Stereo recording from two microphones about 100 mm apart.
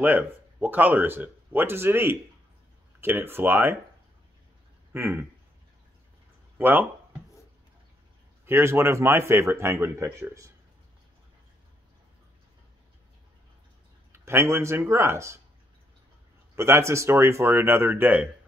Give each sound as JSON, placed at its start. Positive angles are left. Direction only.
{"t": 0.0, "sound": "speech", "side_deg": -15}
{"t": 4.9, "sound": "speech", "side_deg": -20}
{"t": 6.6, "sound": "speech", "side_deg": -20}
{"t": 8.5, "sound": "speech", "side_deg": -25}
{"t": 14.1, "sound": "speech", "side_deg": -25}
{"t": 16.5, "sound": "speech", "side_deg": -25}